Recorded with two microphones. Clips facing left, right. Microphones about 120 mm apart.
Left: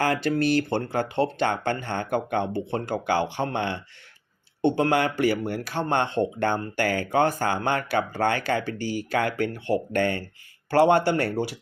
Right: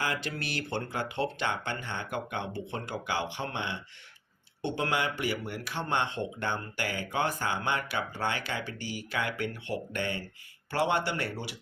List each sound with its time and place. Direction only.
0.0 s speech: 45° left (ahead or behind)
10.0 s speech: 50° left (ahead or behind)
10.7 s speech: 40° left (ahead or behind)